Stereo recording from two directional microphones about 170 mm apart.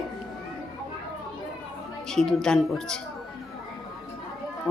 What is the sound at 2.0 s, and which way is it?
Speech, centre (ahead or behind).